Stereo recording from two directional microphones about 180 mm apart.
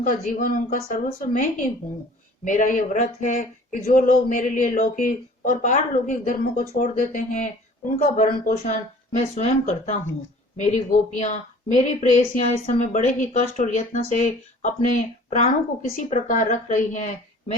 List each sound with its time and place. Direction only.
0.0 s speech: 45° left (ahead or behind)